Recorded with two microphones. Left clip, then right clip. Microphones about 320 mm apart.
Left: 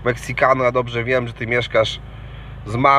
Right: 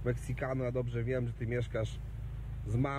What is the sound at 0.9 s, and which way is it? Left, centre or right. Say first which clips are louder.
Speech: left 17 dB; centre.